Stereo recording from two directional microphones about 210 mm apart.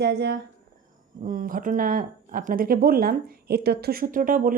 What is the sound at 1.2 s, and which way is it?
Speech, 40° right (ahead or behind).